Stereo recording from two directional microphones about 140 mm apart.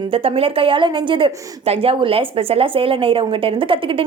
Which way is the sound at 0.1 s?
40° right (ahead or behind).